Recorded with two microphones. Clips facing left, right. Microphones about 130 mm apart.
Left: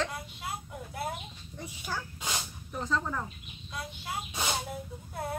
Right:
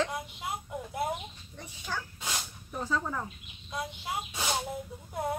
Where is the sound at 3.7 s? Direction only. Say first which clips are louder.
Right 3 dB; 20° right (ahead or behind).